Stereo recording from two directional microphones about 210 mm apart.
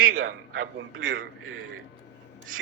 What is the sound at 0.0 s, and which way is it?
A man's voice, 90° right.